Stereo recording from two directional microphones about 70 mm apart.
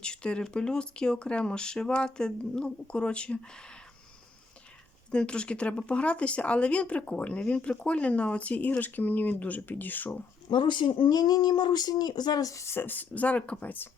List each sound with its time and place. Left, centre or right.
0.0 s speech: centre
5.1 s speech: centre
10.5 s speech: left
11.0 s speech: left